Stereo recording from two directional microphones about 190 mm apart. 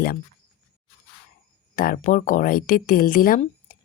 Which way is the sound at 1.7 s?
50° left (ahead or behind).